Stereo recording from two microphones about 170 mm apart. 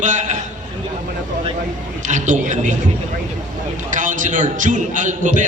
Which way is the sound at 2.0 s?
45° right (ahead or behind).